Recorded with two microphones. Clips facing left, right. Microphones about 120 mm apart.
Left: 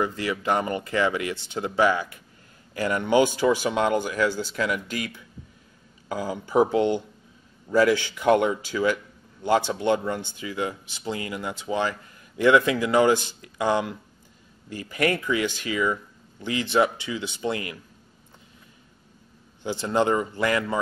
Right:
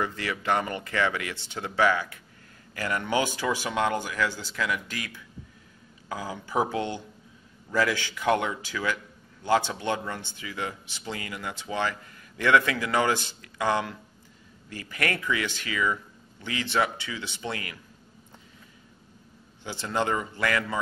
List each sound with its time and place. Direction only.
0.0 s speech: 15° left (ahead or behind)
6.2 s speech: 20° left (ahead or behind)
19.6 s speech: 15° left (ahead or behind)